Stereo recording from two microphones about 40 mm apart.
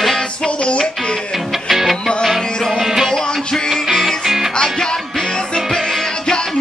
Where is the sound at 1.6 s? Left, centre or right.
Centre.